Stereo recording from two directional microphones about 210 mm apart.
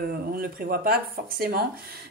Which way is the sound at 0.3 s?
45° right (ahead or behind).